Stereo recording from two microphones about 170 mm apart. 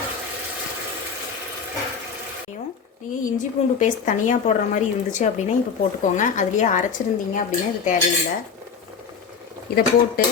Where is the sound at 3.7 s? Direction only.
50° left (ahead or behind).